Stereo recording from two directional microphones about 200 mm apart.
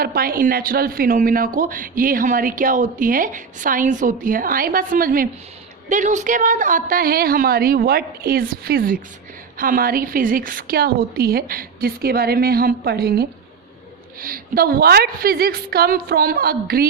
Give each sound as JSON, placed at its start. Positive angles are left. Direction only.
{"t": 0.0, "sound": "speech", "side_deg": -45}